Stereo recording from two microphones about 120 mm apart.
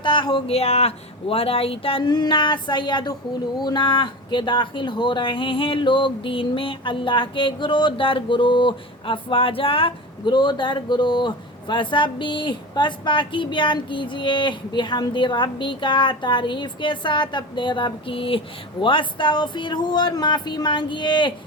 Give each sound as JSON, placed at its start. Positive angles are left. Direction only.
{"t": 0.0, "sound": "speech", "side_deg": 40}
{"t": 0.5, "sound": "speech", "side_deg": 60}
{"t": 2.0, "sound": "speech", "side_deg": 35}